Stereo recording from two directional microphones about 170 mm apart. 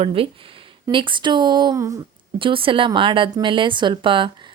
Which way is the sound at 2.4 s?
30° right (ahead or behind).